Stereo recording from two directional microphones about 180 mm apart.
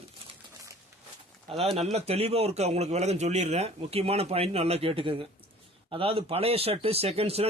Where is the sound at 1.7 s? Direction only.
35° right (ahead or behind).